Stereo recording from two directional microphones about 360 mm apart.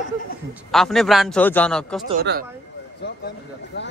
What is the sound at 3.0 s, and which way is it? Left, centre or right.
Speech, left.